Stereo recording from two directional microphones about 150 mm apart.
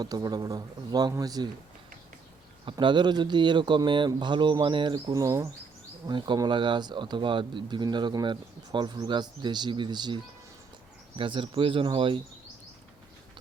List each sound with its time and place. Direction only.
0.0 s speech: 25° right (ahead or behind)
2.6 s speech: 30° right (ahead or behind)
11.2 s speech: 35° right (ahead or behind)